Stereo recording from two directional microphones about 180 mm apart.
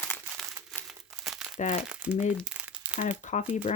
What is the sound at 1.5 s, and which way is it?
Speech, 40° left (ahead or behind).